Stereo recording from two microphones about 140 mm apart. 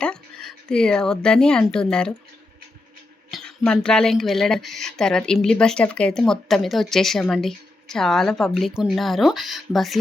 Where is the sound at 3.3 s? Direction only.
5° left (ahead or behind).